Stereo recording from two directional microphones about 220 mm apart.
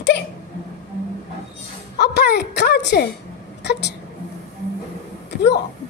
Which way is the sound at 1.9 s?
50° left (ahead or behind).